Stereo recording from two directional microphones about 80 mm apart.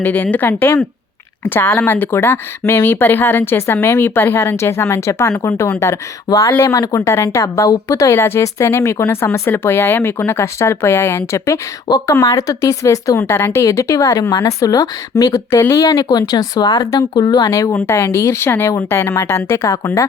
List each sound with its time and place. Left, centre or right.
0.0 s speech: left
6.2 s speech: left
8.1 s speech: left
11.9 s speech: left
15.4 s speech: left